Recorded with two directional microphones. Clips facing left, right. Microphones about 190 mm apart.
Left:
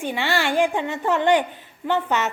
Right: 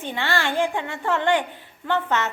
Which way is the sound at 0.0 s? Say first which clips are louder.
Left 2 dB; 15° left (ahead or behind).